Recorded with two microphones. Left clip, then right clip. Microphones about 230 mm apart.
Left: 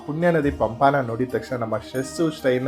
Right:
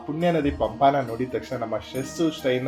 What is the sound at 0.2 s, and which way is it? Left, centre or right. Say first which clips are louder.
Speech: left 3 dB; left.